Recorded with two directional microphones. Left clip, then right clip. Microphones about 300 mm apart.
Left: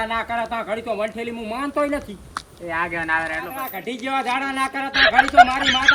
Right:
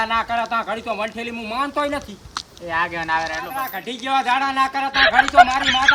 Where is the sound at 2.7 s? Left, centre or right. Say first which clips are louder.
Right 1 dB; centre.